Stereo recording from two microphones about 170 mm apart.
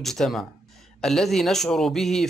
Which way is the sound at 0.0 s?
Centre (ahead or behind).